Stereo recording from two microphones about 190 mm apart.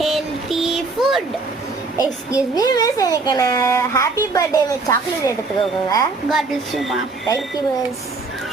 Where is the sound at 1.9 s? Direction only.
15° left (ahead or behind).